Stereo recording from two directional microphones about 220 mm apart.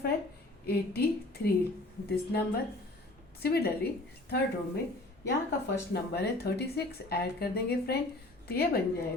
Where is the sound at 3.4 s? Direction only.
45° left (ahead or behind).